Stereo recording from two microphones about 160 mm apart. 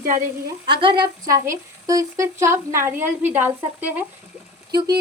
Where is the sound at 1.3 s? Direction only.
20° right (ahead or behind).